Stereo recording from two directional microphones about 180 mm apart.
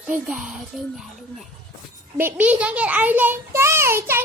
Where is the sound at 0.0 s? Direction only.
5° right (ahead or behind).